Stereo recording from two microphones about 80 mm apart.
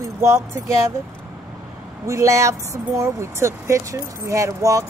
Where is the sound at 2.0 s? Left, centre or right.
Right.